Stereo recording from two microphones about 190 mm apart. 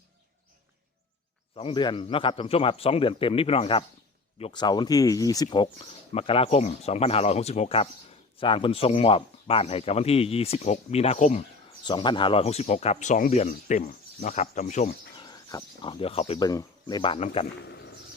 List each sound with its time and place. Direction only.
1.5 s a man's voice: 25° left (ahead or behind)
11.8 s speech: 25° left (ahead or behind)
15.2 s speech: 20° left (ahead or behind)
16.5 s a man's voice: 20° left (ahead or behind)
17.7 s a sound: 65° left (ahead or behind)